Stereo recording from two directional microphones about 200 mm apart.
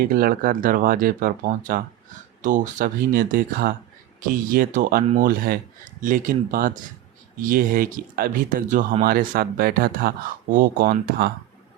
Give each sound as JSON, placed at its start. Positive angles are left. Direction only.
{"t": 0.0, "sound": "speech", "side_deg": -45}